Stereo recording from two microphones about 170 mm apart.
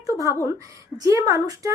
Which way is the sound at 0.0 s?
20° right (ahead or behind).